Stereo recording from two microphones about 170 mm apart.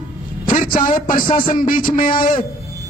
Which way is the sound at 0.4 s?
55° left (ahead or behind).